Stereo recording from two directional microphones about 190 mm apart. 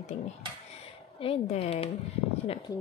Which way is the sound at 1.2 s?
30° left (ahead or behind).